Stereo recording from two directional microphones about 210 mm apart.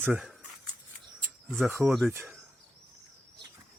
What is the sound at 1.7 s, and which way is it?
Speech, 10° right (ahead or behind).